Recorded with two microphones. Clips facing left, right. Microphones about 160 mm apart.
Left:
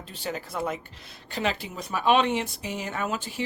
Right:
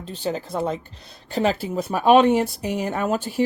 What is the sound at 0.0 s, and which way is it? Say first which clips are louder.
Speech: right 7 dB; 35° right (ahead or behind).